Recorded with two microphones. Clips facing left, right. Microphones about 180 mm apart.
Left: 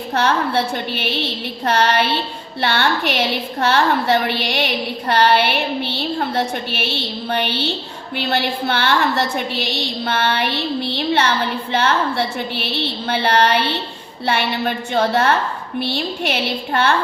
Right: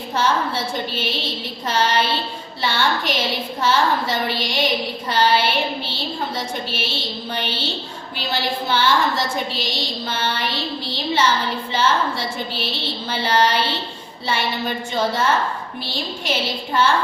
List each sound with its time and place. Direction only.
0.1 s a woman's voice: 65° left (ahead or behind)